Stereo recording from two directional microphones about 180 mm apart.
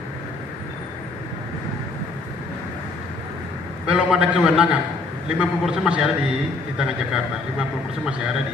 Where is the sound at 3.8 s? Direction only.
5° right (ahead or behind).